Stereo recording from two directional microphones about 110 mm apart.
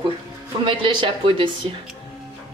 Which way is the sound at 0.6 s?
50° right (ahead or behind).